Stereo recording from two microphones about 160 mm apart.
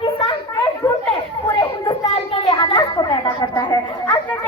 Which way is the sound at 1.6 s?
20° left (ahead or behind).